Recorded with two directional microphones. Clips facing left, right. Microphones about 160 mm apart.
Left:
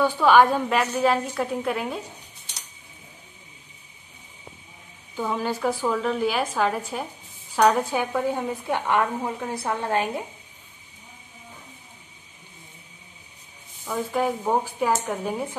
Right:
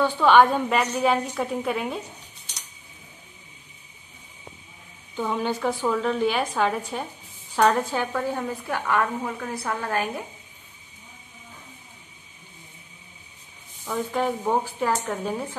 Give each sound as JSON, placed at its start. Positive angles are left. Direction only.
{"t": 0.0, "sound": "a woman's voice", "side_deg": 5}
{"t": 5.1, "sound": "a woman's voice", "side_deg": 5}
{"t": 13.8, "sound": "speech", "side_deg": 5}